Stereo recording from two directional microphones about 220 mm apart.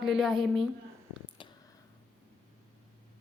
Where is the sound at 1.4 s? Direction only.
25° left (ahead or behind).